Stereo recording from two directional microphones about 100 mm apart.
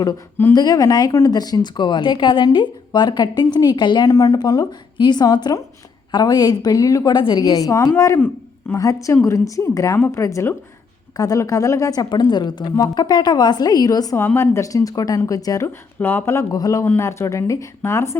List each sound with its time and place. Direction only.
0.5 s speech: 40° left (ahead or behind)
4.1 s a woman's voice: 35° left (ahead or behind)
7.1 s a woman's voice: 50° left (ahead or behind)
14.2 s a woman's voice: 20° left (ahead or behind)
16.0 s speech: 20° left (ahead or behind)